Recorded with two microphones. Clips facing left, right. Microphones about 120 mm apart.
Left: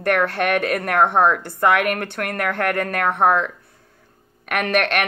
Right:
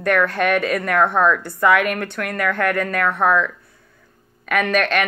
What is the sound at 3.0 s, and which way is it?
Speech, 20° left (ahead or behind).